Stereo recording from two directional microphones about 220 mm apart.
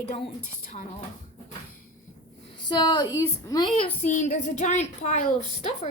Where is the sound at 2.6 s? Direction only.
20° left (ahead or behind).